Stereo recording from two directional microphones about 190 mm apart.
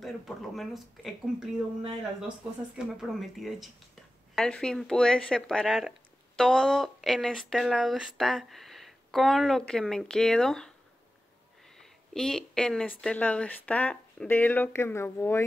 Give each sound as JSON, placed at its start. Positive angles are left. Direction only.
{"t": 0.0, "sound": "speech", "side_deg": 0}
{"t": 11.8, "sound": "speech", "side_deg": 0}